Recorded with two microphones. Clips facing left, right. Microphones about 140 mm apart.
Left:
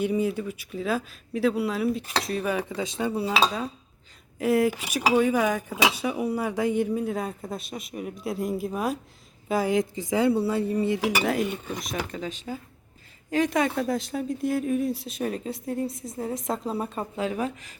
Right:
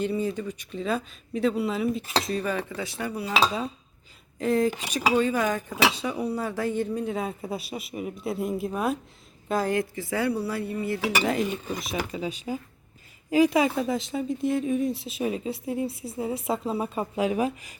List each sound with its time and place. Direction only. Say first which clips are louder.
0.0 s speech: left 2 dB; 10° left (ahead or behind)
4.4 s speech: left 1 dB; 10° left (ahead or behind)
7.0 s speech: even; centre (ahead or behind)